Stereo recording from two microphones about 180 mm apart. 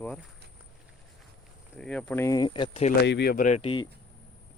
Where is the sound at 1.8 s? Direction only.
5° left (ahead or behind); by 2.9 s 30° left (ahead or behind).